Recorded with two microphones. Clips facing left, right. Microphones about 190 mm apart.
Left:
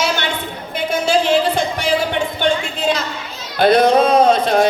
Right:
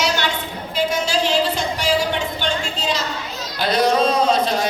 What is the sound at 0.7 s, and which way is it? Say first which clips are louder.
Music: left 4 dB; 55° left (ahead or behind).